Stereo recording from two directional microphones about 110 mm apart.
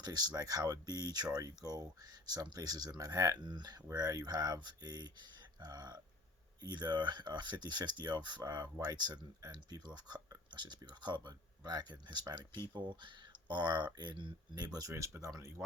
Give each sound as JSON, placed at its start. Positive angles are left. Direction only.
{"t": 0.0, "sound": "speech", "side_deg": -40}